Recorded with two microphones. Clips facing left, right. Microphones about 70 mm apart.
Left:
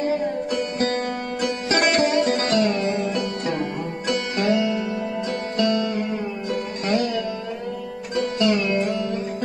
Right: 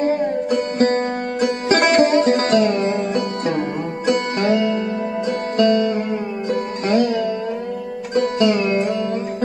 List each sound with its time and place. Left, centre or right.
0.0 s music: right
2.2 s sitar: right
2.5 s music: right
8.1 s music: right